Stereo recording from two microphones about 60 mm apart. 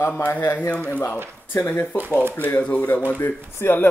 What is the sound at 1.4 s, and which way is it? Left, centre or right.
Speech, left.